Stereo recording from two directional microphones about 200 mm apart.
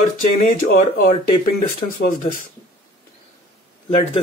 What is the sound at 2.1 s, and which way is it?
Speech, 40° left (ahead or behind).